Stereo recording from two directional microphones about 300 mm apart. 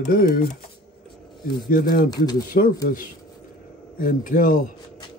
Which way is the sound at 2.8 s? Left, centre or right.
Left.